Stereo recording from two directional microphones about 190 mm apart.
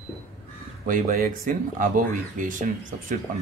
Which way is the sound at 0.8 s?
45° right (ahead or behind).